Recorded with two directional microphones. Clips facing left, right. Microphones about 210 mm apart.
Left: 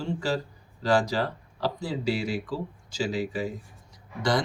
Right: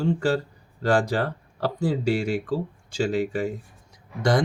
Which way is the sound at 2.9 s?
55° right (ahead or behind).